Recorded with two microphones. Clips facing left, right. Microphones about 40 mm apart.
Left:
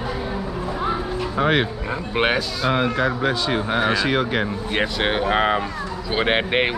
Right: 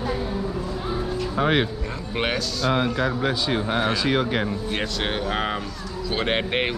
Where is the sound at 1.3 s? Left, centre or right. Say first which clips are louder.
Left 2 dB; centre.